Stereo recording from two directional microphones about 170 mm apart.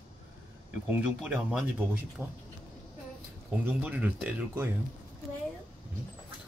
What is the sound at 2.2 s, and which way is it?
Speech, 5° left (ahead or behind).